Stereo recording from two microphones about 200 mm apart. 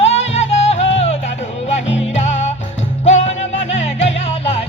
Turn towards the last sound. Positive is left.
turn(degrees=30)  # may be behind; listen again after turning